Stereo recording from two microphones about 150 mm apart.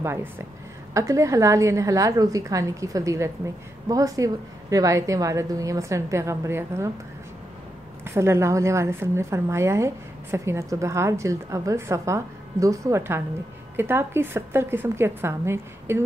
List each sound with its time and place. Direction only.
0.0 s a woman's voice: 15° right (ahead or behind)
8.0 s a woman's voice: 15° right (ahead or behind)